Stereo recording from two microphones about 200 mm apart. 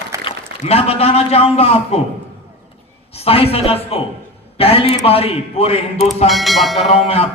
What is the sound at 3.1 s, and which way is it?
A man's voice, 30° left (ahead or behind).